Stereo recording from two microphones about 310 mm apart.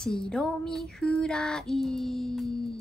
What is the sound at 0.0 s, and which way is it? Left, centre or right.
Child singing, centre.